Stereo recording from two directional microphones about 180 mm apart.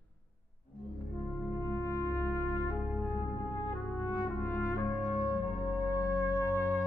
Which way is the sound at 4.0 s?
15° left (ahead or behind).